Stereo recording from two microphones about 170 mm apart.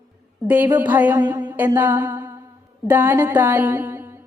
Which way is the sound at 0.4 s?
10° right (ahead or behind).